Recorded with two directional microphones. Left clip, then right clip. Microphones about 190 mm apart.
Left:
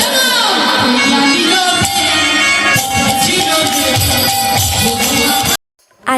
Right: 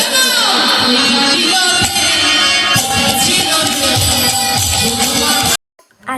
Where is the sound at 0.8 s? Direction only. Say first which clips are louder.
Even; 65° left (ahead or behind).